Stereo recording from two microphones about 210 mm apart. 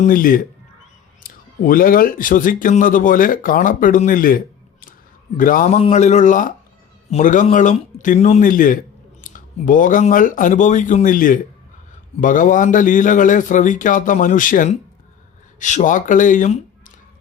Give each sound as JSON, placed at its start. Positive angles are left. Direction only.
{"t": 0.0, "sound": "speech", "side_deg": 40}